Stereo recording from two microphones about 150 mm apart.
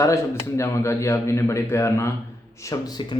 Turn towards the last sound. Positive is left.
turn(degrees=25)  # may be behind; listen again after turning